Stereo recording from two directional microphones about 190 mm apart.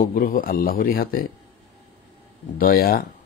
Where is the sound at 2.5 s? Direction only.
50° left (ahead or behind).